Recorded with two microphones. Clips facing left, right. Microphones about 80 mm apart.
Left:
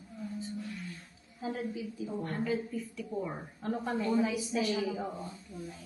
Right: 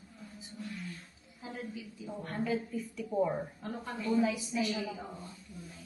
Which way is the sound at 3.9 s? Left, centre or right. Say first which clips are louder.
Even; left.